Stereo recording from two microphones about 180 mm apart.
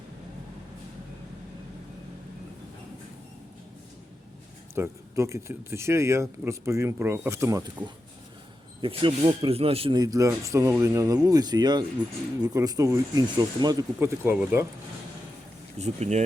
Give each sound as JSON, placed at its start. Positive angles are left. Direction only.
{"t": 4.7, "sound": "speech", "side_deg": -15}
{"t": 8.8, "sound": "speech", "side_deg": -30}
{"t": 15.8, "sound": "speech", "side_deg": -40}